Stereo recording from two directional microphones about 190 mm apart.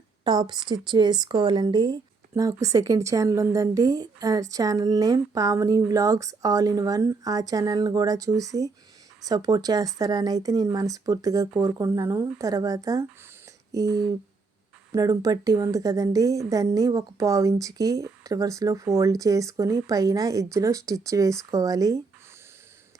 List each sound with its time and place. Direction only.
0.3 s speech: 20° right (ahead or behind)